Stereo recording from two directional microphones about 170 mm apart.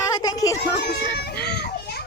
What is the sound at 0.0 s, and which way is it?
Children playing, 20° left (ahead or behind).